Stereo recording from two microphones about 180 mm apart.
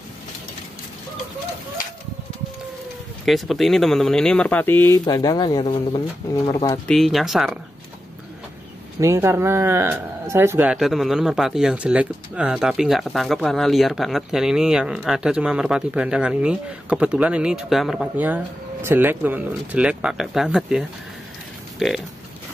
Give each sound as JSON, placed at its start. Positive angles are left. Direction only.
{"t": 3.3, "sound": "speech", "side_deg": 0}
{"t": 4.8, "sound": "speech", "side_deg": 20}
{"t": 6.9, "sound": "speech", "side_deg": 0}
{"t": 9.0, "sound": "speech", "side_deg": -15}